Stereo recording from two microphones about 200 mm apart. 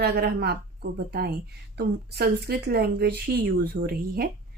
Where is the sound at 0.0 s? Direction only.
55° right (ahead or behind).